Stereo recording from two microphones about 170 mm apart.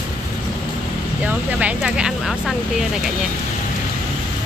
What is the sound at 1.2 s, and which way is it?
Speech, 5° right (ahead or behind).